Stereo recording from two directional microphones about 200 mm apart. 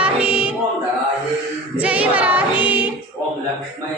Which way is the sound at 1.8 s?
5° right (ahead or behind).